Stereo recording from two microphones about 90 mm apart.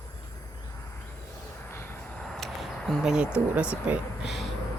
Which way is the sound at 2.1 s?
5° left (ahead or behind).